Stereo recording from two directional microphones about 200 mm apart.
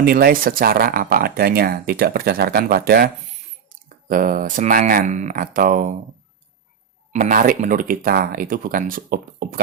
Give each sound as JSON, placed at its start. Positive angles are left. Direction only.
{"t": 0.0, "sound": "speech", "side_deg": -50}
{"t": 7.1, "sound": "speech", "side_deg": -40}